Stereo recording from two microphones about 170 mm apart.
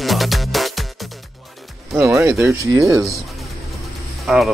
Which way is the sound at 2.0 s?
15° right (ahead or behind).